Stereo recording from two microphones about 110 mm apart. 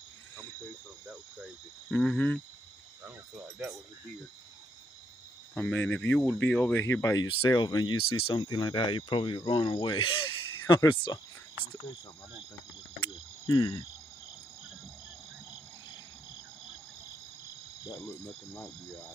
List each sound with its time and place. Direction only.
1.9 s speech: 10° left (ahead or behind)
3.0 s cricket: 15° right (ahead or behind)
5.5 s speech: 15° left (ahead or behind)
7.4 s speech: 35° left (ahead or behind)
10.8 s speech: 35° left (ahead or behind)
13.5 s speech: 30° left (ahead or behind)
18.2 s speech: 25° left (ahead or behind)